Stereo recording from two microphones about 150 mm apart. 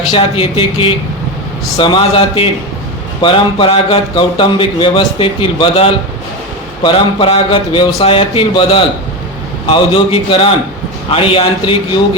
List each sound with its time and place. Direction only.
0.1 s a man's voice: 40° left (ahead or behind)